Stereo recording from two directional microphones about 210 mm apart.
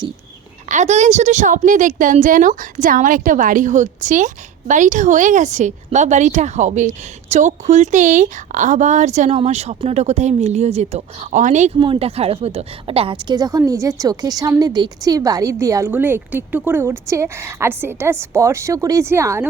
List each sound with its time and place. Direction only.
0.7 s a woman's voice: 35° right (ahead or behind); by 19.5 s 10° right (ahead or behind)